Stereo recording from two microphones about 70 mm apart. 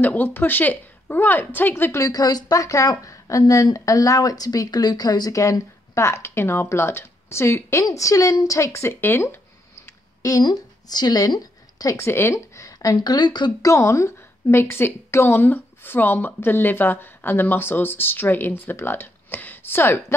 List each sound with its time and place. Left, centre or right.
0.0 s a woman's voice: left
1.9 s a woman's voice: left
2.5 s speech: left
7.8 s speech: left
10.4 s a woman's voice: left
12.0 s speech: left
12.9 s speech: left
13.7 s a woman's voice: left